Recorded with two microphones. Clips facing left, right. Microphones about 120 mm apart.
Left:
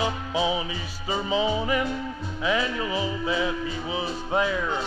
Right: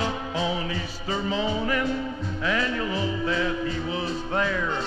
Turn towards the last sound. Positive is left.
turn(degrees=10)  # may be behind; listen again after turning